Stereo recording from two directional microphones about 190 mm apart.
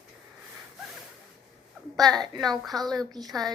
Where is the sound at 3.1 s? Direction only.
20° right (ahead or behind).